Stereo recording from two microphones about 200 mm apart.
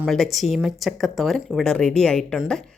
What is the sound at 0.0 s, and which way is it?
Speech, centre (ahead or behind).